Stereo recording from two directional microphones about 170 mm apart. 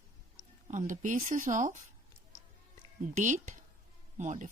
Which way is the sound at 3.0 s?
50° right (ahead or behind).